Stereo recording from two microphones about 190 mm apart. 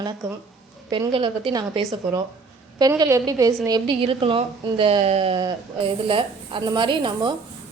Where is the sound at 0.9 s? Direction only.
25° right (ahead or behind).